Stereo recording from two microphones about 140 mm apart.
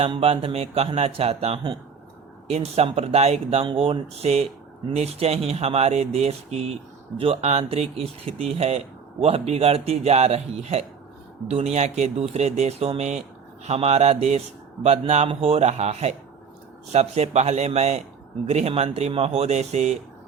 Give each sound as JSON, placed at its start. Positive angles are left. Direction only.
{"t": 0.0, "sound": "speech", "side_deg": -45}